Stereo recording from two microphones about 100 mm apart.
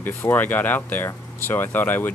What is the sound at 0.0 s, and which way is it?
Speech, 20° left (ahead or behind).